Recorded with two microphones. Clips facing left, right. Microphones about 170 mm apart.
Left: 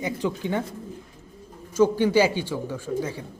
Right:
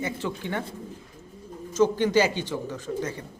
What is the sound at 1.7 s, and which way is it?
Speech, 10° left (ahead or behind).